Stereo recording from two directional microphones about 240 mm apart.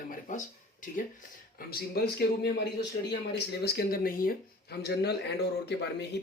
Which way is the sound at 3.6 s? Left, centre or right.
Left.